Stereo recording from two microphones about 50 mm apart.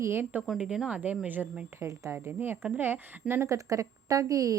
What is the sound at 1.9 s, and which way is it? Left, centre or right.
Speech, right.